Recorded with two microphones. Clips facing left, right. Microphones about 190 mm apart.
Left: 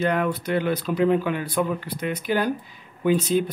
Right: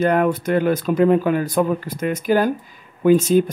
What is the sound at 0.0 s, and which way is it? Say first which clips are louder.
Speech: right 6 dB; 50° right (ahead or behind).